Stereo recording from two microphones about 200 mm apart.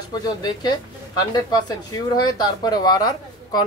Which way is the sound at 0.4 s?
20° left (ahead or behind).